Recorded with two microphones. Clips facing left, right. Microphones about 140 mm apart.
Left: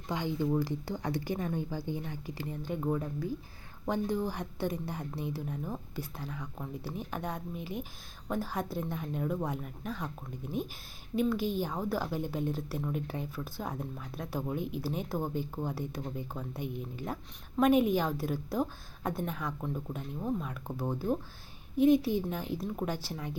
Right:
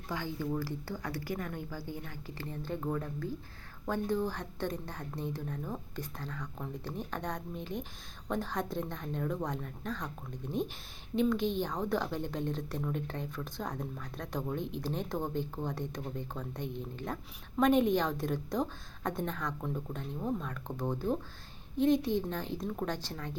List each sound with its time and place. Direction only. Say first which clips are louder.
0.1 s a woman's voice: left 4 dB; 20° left (ahead or behind)